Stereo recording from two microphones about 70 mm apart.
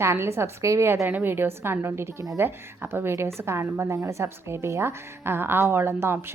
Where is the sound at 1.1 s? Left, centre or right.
Right.